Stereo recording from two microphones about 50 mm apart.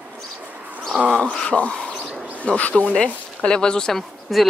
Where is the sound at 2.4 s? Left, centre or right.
Left; by 4.0 s centre.